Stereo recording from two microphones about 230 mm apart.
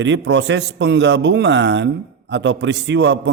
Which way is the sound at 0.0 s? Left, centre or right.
Right.